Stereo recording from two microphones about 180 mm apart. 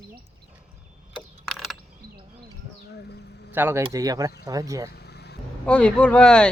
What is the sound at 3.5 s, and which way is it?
Speech, 10° right (ahead or behind).